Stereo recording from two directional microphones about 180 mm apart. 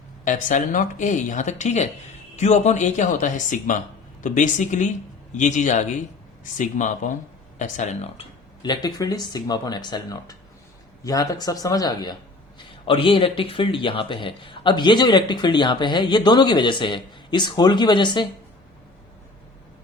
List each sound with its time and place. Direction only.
0.3 s speech: 45° left (ahead or behind); by 18.3 s 25° left (ahead or behind)